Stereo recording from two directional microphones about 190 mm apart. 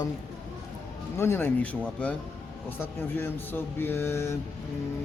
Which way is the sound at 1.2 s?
10° left (ahead or behind).